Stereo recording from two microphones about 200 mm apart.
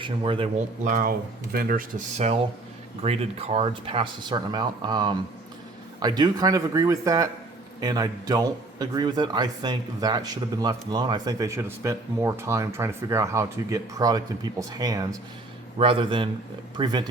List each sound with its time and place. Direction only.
0.0 s a man's voice: 25° right (ahead or behind)
0.9 s a man's voice: 40° right (ahead or behind); by 17.1 s 20° right (ahead or behind)